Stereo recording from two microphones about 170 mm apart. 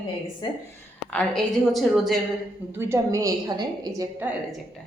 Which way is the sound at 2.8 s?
15° right (ahead or behind).